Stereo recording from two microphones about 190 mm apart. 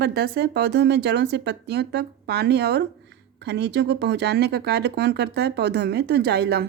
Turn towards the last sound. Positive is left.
turn(degrees=-55)  # may be behind; listen again after turning